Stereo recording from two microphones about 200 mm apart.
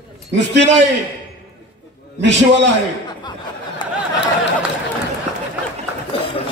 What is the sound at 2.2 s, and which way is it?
Speech, 60° right (ahead or behind).